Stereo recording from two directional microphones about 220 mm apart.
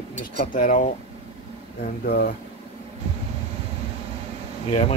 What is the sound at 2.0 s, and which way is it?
Speech, 45° left (ahead or behind).